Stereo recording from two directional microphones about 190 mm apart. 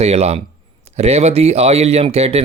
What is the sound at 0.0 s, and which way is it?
Speech, 35° right (ahead or behind).